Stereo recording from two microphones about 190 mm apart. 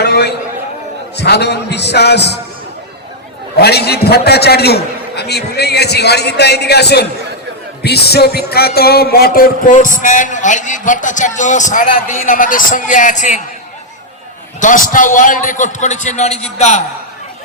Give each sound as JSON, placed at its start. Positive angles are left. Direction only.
{"t": 0.0, "sound": "a sound", "side_deg": 60}
{"t": 1.1, "sound": "a man's voice", "side_deg": 60}
{"t": 3.6, "sound": "a man's voice", "side_deg": 60}
{"t": 7.8, "sound": "music", "side_deg": 60}
{"t": 14.6, "sound": "a man's voice", "side_deg": 45}